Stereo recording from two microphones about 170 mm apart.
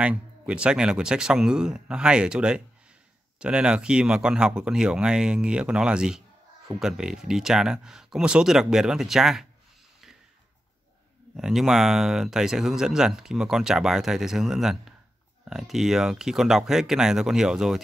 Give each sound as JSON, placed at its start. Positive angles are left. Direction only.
{"t": 0.0, "sound": "speech", "side_deg": -5}
{"t": 11.3, "sound": "speech", "side_deg": 0}